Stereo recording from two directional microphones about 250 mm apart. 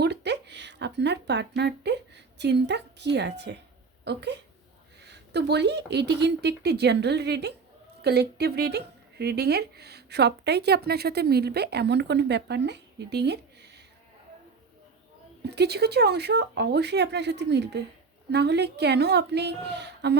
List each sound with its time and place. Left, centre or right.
0.0 s speech: right
15.4 s speech: right